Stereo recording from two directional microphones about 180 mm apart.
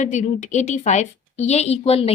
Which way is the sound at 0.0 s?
40° left (ahead or behind).